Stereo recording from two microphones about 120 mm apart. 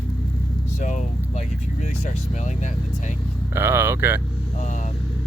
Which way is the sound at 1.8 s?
85° left.